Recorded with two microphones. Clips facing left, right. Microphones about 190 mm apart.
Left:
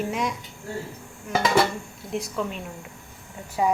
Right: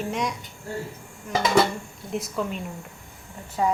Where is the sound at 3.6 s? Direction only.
10° left (ahead or behind).